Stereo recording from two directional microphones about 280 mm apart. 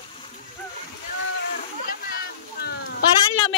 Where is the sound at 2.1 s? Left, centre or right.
Left.